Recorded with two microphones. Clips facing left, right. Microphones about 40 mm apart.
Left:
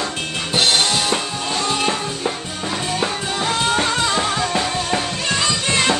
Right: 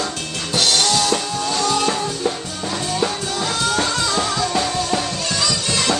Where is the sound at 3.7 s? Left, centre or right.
Left.